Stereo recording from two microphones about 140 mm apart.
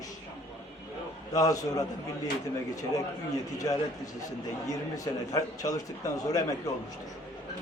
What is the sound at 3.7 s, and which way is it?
Speech, 25° left (ahead or behind).